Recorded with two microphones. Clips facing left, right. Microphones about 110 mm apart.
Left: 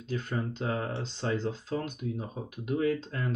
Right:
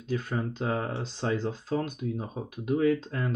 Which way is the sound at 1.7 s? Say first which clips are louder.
Right 3 dB; 40° right (ahead or behind).